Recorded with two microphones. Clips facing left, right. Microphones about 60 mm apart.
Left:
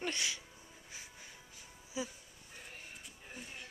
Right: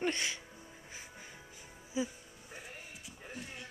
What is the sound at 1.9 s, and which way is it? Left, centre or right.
Music, right.